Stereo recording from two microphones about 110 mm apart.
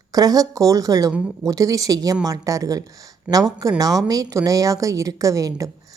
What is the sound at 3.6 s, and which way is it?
A woman's voice, 35° right (ahead or behind).